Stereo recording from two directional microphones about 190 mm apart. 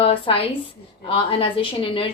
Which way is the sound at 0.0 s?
30° left (ahead or behind).